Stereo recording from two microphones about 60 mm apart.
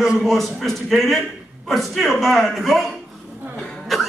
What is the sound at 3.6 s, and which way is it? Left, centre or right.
Cough, centre.